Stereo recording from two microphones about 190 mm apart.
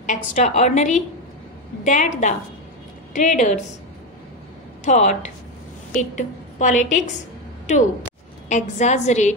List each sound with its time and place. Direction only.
0.0 s a woman's voice: 40° left (ahead or behind)
4.8 s a woman's voice: 40° left (ahead or behind)
8.5 s a woman's voice: 40° left (ahead or behind)